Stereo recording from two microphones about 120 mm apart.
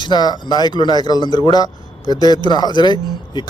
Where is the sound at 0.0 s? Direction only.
35° left (ahead or behind).